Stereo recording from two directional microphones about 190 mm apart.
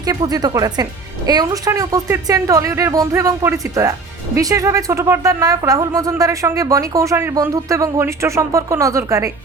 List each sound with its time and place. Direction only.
0.0 s a woman's voice: 20° right (ahead or behind)